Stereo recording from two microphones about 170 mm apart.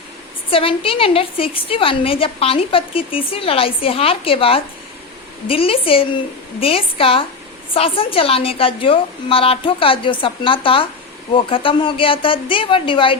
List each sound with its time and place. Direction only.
0.5 s a woman's voice: 30° left (ahead or behind)